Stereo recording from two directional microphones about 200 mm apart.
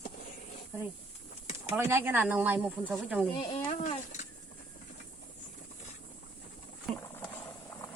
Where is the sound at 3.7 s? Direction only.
35° left (ahead or behind).